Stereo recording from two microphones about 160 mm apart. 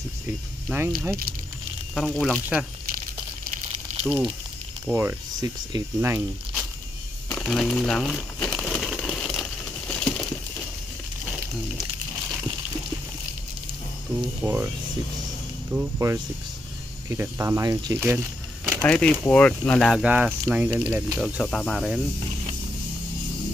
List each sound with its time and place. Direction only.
0.7 s speech: 15° right (ahead or behind)
2.0 s speech: 5° left (ahead or behind)
3.4 s a sound: 45° right (ahead or behind)
4.8 s speech: 15° right (ahead or behind)
7.2 s crumpling: 5° left (ahead or behind)
14.1 s speech: 10° right (ahead or behind)
15.7 s speech: 15° right (ahead or behind)
18.8 s speech: 5° left (ahead or behind); by 21.2 s 10° right (ahead or behind)
21.3 s speech: centre (ahead or behind)